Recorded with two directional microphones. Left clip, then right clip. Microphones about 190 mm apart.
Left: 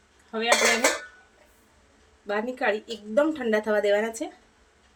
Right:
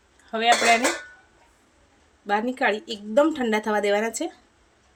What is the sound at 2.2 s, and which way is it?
Speech, 45° right (ahead or behind).